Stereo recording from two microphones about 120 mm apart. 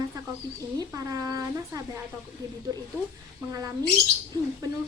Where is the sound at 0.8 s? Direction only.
30° right (ahead or behind).